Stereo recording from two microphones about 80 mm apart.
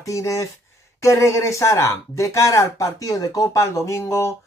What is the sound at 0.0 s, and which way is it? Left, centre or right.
Speech, left.